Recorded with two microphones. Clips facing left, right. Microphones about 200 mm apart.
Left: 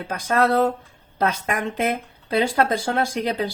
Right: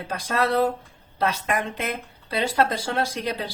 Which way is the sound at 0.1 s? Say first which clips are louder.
Left 4 dB; 50° left (ahead or behind).